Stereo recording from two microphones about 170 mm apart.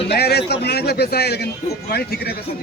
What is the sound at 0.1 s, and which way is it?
A man's voice, 70° left (ahead or behind).